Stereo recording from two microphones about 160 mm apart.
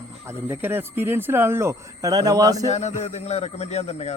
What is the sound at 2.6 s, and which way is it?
A man's voice, 45° left (ahead or behind).